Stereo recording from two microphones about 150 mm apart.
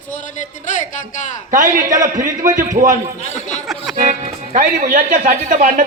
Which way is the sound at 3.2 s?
55° left (ahead or behind).